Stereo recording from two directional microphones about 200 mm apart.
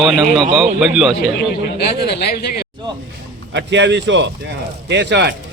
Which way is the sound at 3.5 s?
60° right (ahead or behind).